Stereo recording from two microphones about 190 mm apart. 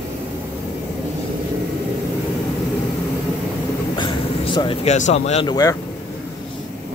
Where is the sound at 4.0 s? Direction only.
25° left (ahead or behind).